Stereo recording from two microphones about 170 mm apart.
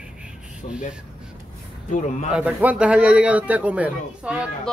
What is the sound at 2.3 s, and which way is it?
Speech, 10° right (ahead or behind).